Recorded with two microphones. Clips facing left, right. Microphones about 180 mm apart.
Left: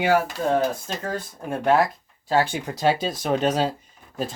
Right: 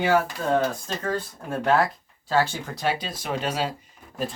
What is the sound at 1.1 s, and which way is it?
Speech, 15° left (ahead or behind).